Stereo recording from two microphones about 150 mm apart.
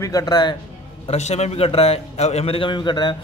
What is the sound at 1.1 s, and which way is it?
A man's voice, 45° left (ahead or behind).